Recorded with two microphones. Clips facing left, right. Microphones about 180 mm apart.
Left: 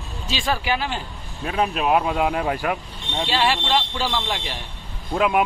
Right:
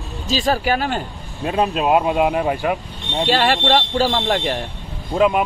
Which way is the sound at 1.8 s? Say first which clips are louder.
Right 4 dB; 5° right (ahead or behind).